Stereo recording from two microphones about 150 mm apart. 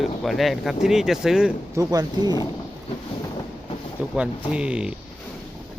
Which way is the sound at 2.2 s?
30° left (ahead or behind).